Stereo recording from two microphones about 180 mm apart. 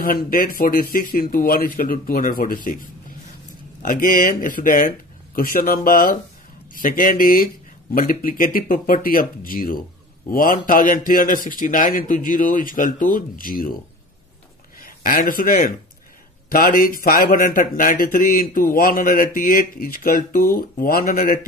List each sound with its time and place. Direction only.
0.0 s speech: 55° left (ahead or behind)
3.8 s speech: 50° left (ahead or behind)
14.8 s a man's voice: 55° left (ahead or behind)